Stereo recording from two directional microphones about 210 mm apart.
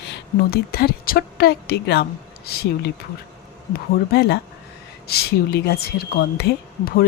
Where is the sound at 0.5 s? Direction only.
45° left (ahead or behind).